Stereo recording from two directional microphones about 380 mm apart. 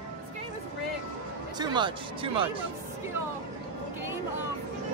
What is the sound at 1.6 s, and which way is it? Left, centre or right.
Speech, centre.